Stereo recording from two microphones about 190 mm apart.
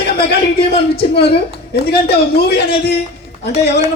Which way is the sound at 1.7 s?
55° left (ahead or behind).